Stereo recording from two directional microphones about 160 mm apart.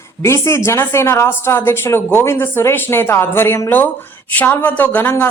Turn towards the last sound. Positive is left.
turn(degrees=15)  # may be behind; listen again after turning